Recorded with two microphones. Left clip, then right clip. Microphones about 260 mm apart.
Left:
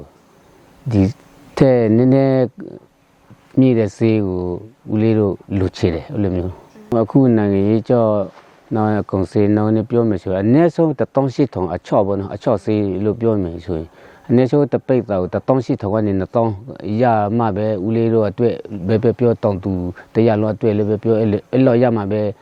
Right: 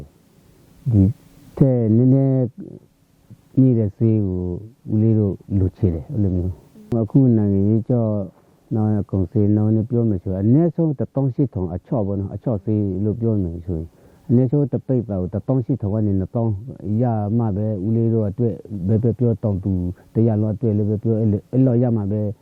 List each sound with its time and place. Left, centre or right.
0.9 s speech: centre
3.6 s speech: centre
4.3 s speech: left
4.9 s speech: centre